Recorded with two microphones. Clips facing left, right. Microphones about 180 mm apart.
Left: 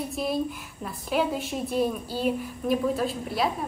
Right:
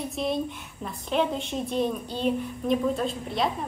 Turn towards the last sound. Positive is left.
turn(degrees=5)  # may be behind; listen again after turning